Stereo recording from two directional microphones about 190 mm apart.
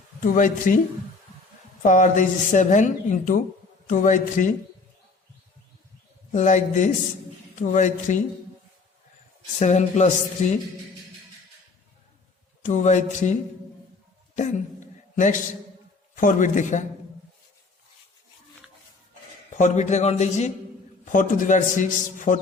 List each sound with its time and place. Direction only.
0.3 s a man's voice: 45° left (ahead or behind)
1.8 s a man's voice: 40° left (ahead or behind)
6.3 s speech: 40° left (ahead or behind)
9.6 s speech: 40° left (ahead or behind)
12.6 s speech: 40° left (ahead or behind)
15.1 s a man's voice: 40° left (ahead or behind)
19.5 s a man's voice: 40° left (ahead or behind)